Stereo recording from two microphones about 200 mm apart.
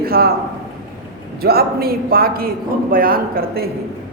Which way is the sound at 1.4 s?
50° right (ahead or behind).